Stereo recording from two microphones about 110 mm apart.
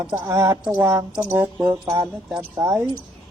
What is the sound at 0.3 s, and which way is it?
Speech, 30° right (ahead or behind).